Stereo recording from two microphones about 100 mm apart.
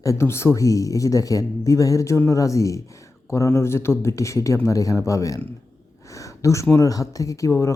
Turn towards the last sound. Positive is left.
turn(degrees=30)  # may be behind; listen again after turning